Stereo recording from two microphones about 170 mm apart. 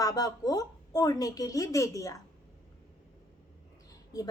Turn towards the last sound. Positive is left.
turn(degrees=20)  # may be behind; listen again after turning